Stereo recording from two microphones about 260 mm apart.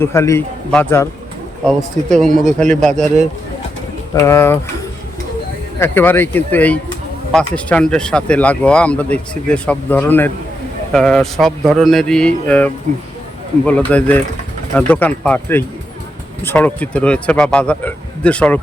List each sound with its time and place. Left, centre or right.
0.0 s a man's voice: centre
2.0 s speech: centre
4.1 s a man's voice: centre
5.8 s a man's voice: centre